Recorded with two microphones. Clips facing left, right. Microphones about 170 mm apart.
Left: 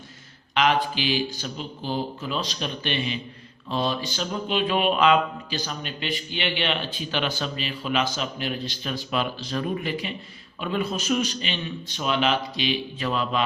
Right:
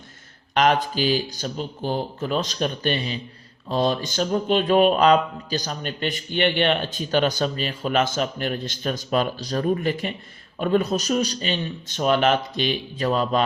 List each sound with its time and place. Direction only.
0.5 s a man's voice: 45° right (ahead or behind)